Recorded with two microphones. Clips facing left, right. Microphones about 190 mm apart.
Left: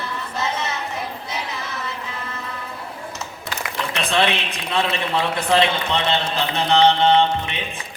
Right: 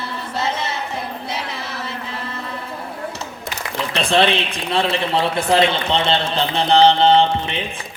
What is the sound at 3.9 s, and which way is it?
A man's voice, 30° right (ahead or behind).